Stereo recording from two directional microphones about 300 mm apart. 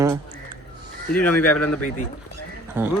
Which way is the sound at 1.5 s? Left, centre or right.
Left.